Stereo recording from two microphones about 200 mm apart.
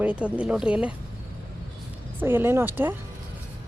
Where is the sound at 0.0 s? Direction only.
5° right (ahead or behind).